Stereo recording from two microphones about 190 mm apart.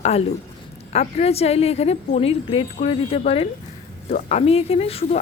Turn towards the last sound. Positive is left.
turn(degrees=30)  # may be behind; listen again after turning